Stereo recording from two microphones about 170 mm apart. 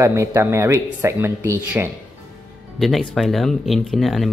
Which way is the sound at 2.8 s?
Centre (ahead or behind).